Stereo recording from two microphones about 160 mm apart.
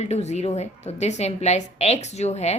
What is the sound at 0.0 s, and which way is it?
A woman's voice, 45° left (ahead or behind).